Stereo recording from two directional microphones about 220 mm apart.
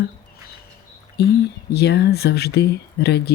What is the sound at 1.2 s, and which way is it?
Speech, 50° left (ahead or behind).